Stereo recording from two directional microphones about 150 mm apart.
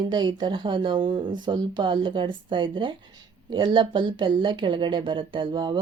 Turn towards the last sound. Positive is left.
turn(degrees=-30)  # may be behind; listen again after turning